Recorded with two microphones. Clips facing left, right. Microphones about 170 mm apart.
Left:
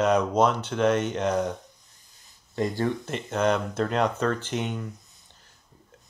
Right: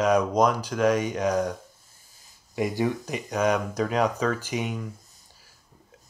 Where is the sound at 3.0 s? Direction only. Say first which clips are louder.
Even; 10° right (ahead or behind).